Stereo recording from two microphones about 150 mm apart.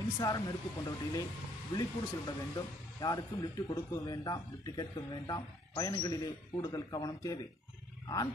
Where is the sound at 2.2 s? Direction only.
25° left (ahead or behind).